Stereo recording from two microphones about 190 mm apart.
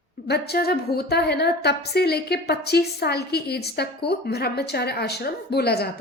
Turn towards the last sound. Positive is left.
turn(degrees=55)  # may be behind; listen again after turning